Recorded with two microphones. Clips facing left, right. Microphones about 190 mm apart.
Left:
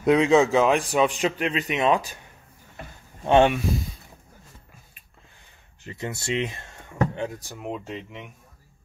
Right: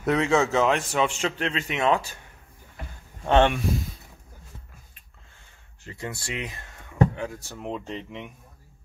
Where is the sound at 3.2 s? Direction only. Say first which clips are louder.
Left 2 dB; 10° left (ahead or behind).